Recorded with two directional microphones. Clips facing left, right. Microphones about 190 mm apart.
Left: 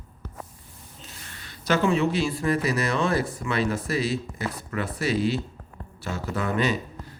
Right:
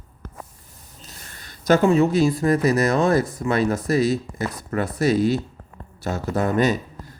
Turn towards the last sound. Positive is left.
turn(degrees=-40)  # may be behind; listen again after turning